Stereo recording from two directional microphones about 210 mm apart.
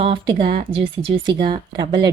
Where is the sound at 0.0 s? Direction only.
25° right (ahead or behind).